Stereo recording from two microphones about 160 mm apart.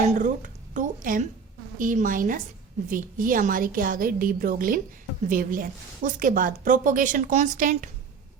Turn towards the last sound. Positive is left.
turn(degrees=-55)  # may be behind; listen again after turning